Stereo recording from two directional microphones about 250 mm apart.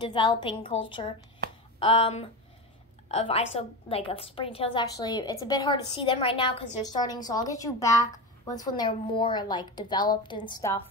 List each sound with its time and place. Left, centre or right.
0.0 s a woman's voice: centre
1.8 s a woman's voice: left